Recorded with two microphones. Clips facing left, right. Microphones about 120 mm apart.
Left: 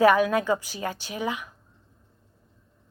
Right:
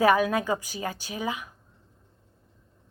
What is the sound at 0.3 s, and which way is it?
Speech, 15° right (ahead or behind).